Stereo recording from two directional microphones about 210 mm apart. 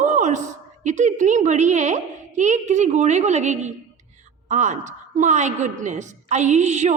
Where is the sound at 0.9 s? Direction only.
35° right (ahead or behind).